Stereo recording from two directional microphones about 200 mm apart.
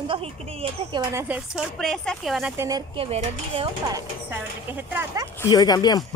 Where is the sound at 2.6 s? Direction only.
15° right (ahead or behind).